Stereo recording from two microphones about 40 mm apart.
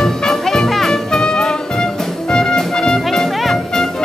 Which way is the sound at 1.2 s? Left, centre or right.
Centre.